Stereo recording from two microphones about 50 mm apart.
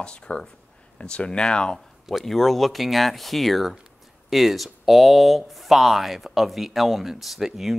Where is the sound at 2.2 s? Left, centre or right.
Centre.